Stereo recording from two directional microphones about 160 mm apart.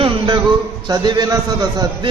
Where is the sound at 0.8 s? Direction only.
25° right (ahead or behind).